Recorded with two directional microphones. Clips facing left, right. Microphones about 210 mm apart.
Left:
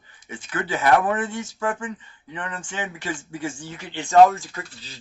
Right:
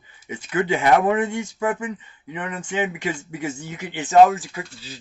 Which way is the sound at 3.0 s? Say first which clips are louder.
Right 2 dB; 10° right (ahead or behind).